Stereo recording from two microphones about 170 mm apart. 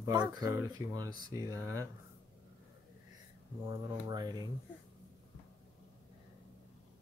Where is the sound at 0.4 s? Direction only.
20° right (ahead or behind).